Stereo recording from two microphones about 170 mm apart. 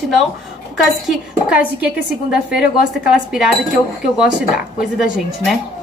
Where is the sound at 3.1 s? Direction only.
5° right (ahead or behind).